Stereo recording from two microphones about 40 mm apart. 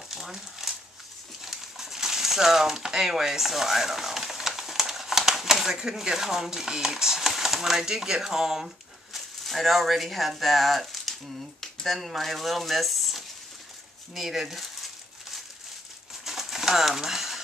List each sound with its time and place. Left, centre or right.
0.1 s crumpling: centre
1.4 s speech: centre
16.3 s bird: centre